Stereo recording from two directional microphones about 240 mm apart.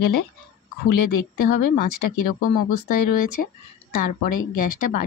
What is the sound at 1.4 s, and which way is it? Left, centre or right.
Speech, left.